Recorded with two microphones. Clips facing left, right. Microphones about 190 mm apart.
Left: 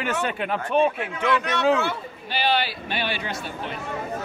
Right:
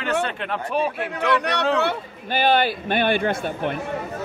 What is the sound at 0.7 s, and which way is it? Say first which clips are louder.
Speech: left 3 dB; 5° right (ahead or behind).